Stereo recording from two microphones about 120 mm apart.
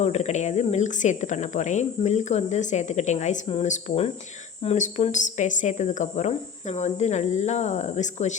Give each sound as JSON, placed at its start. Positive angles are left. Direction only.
{"t": 0.0, "sound": "speech", "side_deg": 70}